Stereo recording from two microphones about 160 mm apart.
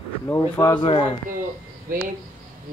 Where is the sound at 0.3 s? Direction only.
20° left (ahead or behind).